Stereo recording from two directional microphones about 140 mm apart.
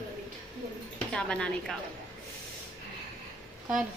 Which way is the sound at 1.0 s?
5° left (ahead or behind).